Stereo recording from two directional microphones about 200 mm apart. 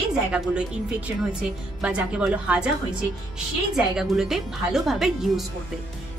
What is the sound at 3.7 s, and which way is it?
A woman's voice, centre (ahead or behind).